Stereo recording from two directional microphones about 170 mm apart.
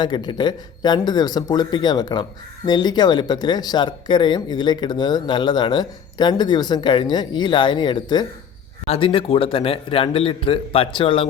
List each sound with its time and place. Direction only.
0.0 s a man's voice: 25° left (ahead or behind)